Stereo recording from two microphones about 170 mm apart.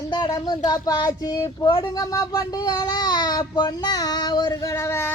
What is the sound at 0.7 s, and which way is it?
Child singing, 25° left (ahead or behind).